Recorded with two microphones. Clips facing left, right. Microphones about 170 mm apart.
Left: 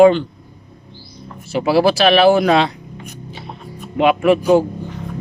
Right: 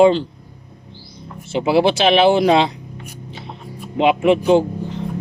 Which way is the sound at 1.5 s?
25° right (ahead or behind).